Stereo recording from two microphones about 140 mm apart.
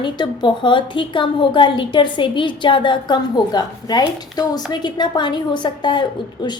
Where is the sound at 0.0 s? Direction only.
35° left (ahead or behind).